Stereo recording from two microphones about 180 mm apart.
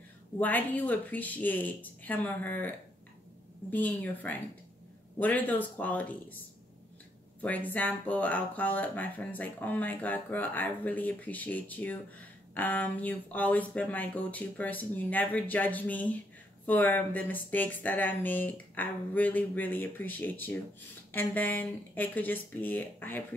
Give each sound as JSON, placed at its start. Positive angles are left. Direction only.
{"t": 0.4, "sound": "speech", "side_deg": 10}
{"t": 3.7, "sound": "speech", "side_deg": 10}
{"t": 7.4, "sound": "speech", "side_deg": 10}